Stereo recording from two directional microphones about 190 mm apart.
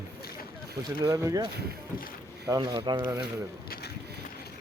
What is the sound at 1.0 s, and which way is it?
Speech, 20° right (ahead or behind).